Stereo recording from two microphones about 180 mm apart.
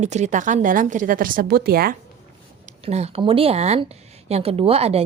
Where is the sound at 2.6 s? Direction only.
35° right (ahead or behind).